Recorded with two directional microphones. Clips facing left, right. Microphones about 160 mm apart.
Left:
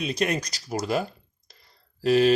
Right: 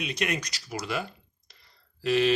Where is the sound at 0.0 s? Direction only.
35° left (ahead or behind).